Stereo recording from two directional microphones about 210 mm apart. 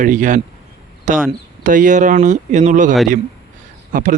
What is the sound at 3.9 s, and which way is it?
Speech, 40° right (ahead or behind).